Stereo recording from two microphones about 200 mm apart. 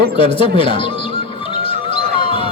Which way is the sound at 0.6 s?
25° left (ahead or behind).